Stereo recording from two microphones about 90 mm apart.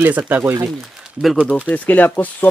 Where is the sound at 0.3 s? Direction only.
20° right (ahead or behind).